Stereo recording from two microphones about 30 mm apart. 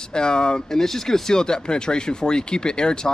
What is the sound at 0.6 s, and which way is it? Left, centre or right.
Speech, centre.